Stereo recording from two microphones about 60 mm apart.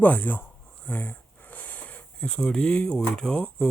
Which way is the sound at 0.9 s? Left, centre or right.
Left.